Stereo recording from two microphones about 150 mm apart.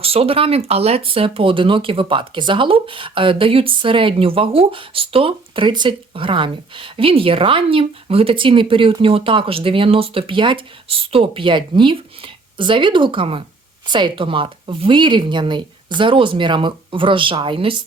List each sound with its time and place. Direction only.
0.0 s speech: 40° right (ahead or behind)